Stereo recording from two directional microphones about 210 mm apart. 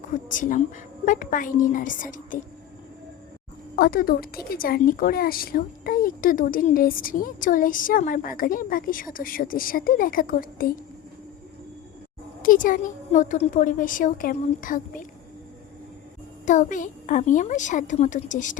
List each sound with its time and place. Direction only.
0.1 s a woman's voice: 40° left (ahead or behind)
3.8 s a woman's voice: 45° left (ahead or behind)
12.4 s a woman's voice: 40° left (ahead or behind)
16.5 s a woman's voice: 35° left (ahead or behind)